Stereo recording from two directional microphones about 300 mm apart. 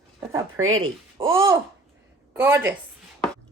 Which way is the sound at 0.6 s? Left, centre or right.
Right.